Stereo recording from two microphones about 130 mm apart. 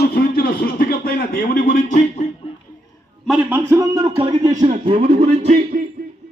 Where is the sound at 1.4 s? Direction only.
90° left.